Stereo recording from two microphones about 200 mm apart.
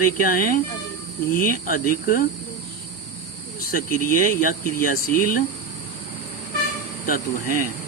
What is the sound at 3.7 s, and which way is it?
Cricket, 45° left (ahead or behind).